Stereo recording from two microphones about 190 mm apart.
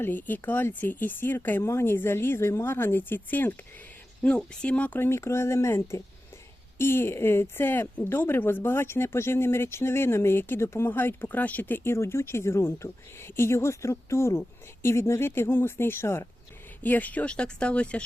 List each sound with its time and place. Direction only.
0.0 s speech: 10° left (ahead or behind)